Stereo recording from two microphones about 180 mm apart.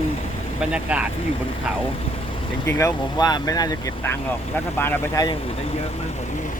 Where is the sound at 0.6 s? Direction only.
5° right (ahead or behind).